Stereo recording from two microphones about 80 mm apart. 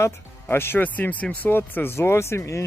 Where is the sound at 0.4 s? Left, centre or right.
Left.